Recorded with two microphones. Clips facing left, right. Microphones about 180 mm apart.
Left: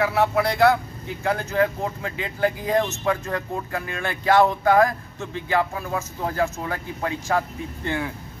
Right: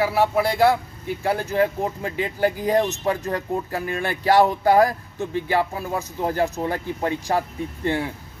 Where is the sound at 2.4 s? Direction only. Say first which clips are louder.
Right 1 dB; 35° right (ahead or behind).